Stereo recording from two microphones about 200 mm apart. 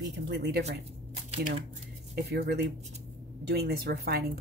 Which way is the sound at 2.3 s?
55° right (ahead or behind).